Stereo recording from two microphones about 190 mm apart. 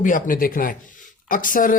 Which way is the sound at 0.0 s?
45° left (ahead or behind).